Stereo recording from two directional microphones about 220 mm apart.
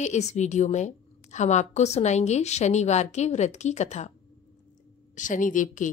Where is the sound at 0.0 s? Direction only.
30° left (ahead or behind).